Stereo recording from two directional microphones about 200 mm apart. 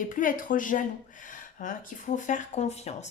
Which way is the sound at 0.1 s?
40° left (ahead or behind).